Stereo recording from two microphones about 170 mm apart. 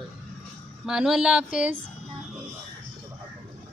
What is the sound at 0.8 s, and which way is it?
Speech, 5° right (ahead or behind).